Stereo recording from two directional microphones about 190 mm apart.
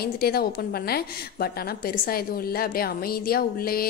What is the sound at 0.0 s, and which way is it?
A woman's voice, 55° left (ahead or behind).